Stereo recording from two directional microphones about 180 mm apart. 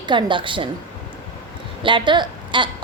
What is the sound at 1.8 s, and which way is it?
Speech, 25° right (ahead or behind).